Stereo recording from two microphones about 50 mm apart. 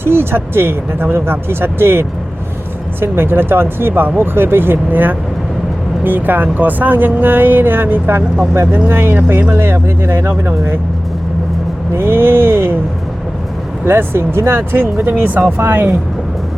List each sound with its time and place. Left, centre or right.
0.0 s speech: right
11.9 s speech: right
13.8 s speech: right